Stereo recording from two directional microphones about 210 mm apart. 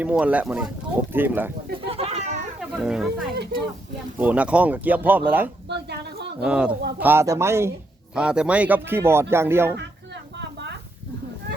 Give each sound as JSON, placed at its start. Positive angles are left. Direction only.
{"t": 0.0, "sound": "speech", "side_deg": -5}
{"t": 1.9, "sound": "cat", "side_deg": -30}
{"t": 2.6, "sound": "speech", "side_deg": -5}
{"t": 3.3, "sound": "speech", "side_deg": -50}
{"t": 4.2, "sound": "speech", "side_deg": -5}
{"t": 5.6, "sound": "a sound", "side_deg": -50}
{"t": 6.4, "sound": "speech", "side_deg": -5}
{"t": 10.3, "sound": "a sound", "side_deg": -55}